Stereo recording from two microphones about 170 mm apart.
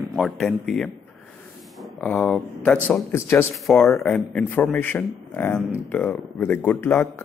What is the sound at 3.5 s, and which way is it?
Speech, centre (ahead or behind).